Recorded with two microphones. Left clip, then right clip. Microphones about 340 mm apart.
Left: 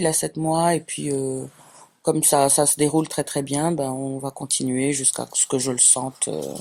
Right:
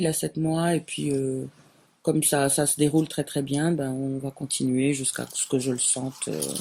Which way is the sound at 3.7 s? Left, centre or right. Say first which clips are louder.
Left 3 dB; left.